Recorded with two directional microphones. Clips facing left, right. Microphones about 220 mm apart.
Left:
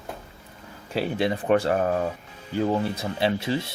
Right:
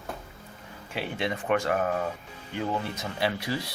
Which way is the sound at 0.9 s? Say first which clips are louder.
Left 6 dB; 35° left (ahead or behind).